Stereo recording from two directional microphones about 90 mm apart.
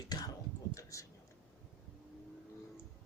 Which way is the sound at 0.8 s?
35° left (ahead or behind).